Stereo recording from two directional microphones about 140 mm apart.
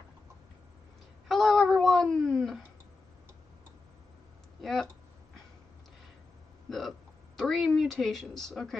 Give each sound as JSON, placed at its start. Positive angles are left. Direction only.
{"t": 1.3, "sound": "cat", "side_deg": 0}
{"t": 4.6, "sound": "a sound", "side_deg": 0}
{"t": 6.7, "sound": "hiccup", "side_deg": 0}